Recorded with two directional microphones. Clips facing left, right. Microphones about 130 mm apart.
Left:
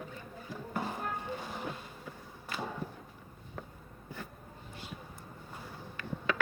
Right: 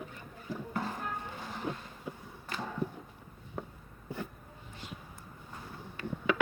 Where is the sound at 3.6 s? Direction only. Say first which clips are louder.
Right 5 dB; 25° right (ahead or behind).